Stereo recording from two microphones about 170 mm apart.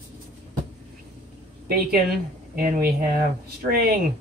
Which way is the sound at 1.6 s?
65° right (ahead or behind).